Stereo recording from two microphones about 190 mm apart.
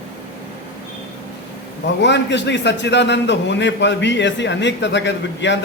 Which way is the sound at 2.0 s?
65° left (ahead or behind).